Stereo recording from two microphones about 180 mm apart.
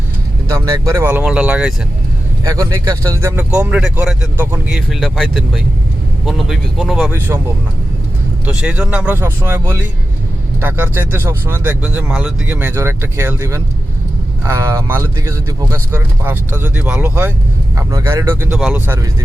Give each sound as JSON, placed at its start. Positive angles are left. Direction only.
{"t": 0.4, "sound": "speech", "side_deg": -15}
{"t": 2.4, "sound": "speech", "side_deg": -20}
{"t": 8.4, "sound": "speech", "side_deg": -5}